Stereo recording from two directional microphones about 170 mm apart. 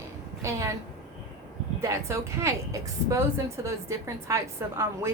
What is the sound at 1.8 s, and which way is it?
A woman's voice, 15° right (ahead or behind).